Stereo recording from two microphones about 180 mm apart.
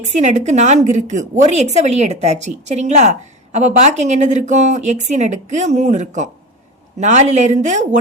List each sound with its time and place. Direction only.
0.0 s a woman's voice: 40° right (ahead or behind)